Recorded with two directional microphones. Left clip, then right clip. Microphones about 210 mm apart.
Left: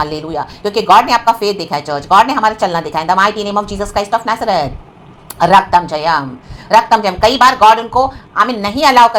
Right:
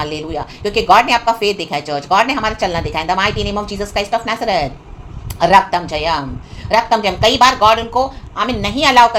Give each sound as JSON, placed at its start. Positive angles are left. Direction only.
{"t": 0.0, "sound": "speech", "side_deg": 15}